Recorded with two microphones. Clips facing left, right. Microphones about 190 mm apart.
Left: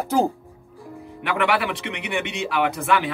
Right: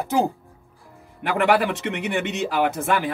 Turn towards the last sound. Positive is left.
turn(degrees=-45)  # may be behind; listen again after turning